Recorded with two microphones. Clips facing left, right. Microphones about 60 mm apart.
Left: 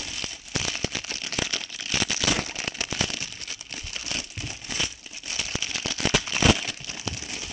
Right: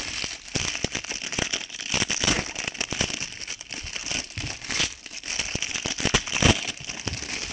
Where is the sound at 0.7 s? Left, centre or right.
Right.